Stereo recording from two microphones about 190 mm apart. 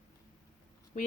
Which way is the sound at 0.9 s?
45° left (ahead or behind).